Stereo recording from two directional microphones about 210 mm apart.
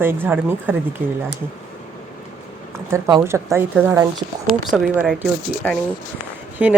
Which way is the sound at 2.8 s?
15° right (ahead or behind).